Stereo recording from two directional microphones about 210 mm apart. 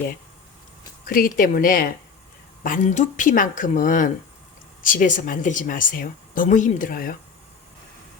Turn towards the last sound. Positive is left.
turn(degrees=45)  # may be behind; listen again after turning